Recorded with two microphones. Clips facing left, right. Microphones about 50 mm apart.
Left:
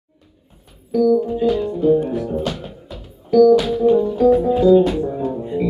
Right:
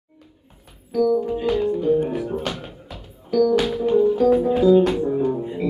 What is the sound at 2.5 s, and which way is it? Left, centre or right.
Music, centre.